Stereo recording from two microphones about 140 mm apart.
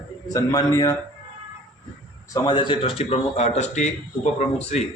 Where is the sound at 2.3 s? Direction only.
30° left (ahead or behind).